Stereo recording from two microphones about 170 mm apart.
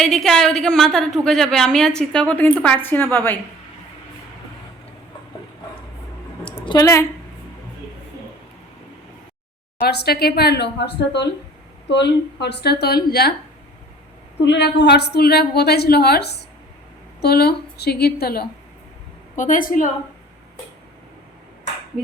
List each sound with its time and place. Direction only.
0.0 s a woman's voice: centre (ahead or behind)
6.7 s a woman's voice: 20° left (ahead or behind)
9.8 s a woman's voice: 70° left (ahead or behind)
14.4 s a woman's voice: 90° left; by 18.4 s 65° left (ahead or behind)
19.4 s a woman's voice: 50° left (ahead or behind)